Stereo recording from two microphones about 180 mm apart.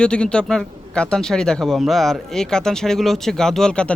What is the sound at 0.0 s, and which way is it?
Speech, 5° left (ahead or behind).